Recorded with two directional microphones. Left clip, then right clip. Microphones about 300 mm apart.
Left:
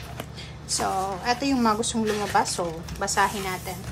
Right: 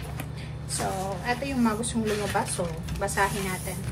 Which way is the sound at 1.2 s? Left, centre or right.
Centre.